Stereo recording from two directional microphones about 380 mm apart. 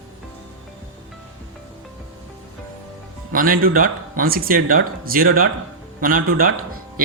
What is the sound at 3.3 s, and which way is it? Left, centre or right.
Speech, right.